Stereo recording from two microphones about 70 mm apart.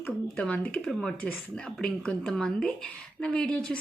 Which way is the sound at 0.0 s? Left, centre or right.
Centre.